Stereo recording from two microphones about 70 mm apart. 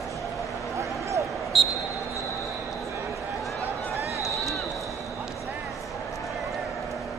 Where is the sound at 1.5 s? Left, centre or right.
Centre.